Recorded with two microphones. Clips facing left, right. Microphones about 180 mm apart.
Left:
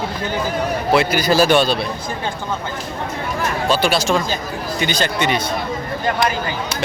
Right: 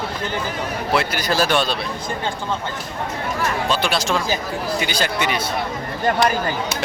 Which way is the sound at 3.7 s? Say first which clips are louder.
Left 6 dB; centre (ahead or behind).